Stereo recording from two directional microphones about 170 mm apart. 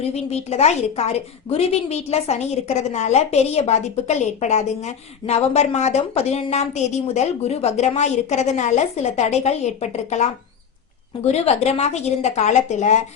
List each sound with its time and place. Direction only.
0.0 s a woman's voice: 40° left (ahead or behind)